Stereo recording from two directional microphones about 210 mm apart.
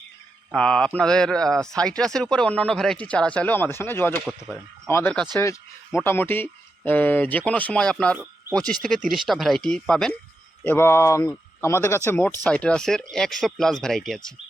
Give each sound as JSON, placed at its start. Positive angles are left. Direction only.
{"t": 0.5, "sound": "speech", "side_deg": 5}
{"t": 4.3, "sound": "speech", "side_deg": 0}
{"t": 4.9, "sound": "speech", "side_deg": 10}